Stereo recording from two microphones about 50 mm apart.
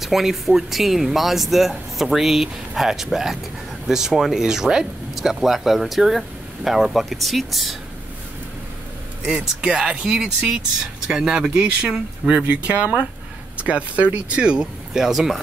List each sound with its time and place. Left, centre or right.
0.0 s speech: centre
9.2 s speech: centre
10.0 s speech: centre
15.0 s speech: centre